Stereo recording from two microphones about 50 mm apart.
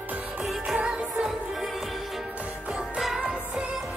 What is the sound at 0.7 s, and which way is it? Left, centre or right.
Music, right.